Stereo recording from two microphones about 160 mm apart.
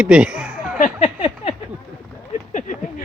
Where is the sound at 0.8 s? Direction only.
40° left (ahead or behind).